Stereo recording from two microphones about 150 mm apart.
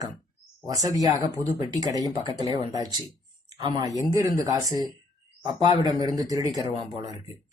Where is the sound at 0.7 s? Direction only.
25° right (ahead or behind).